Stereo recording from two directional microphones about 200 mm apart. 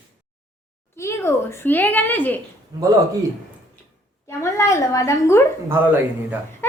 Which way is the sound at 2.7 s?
15° right (ahead or behind).